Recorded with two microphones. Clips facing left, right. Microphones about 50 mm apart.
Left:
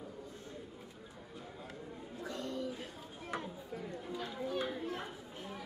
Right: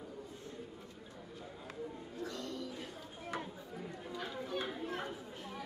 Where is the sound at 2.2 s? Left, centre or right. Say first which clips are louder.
Left 4 dB; left.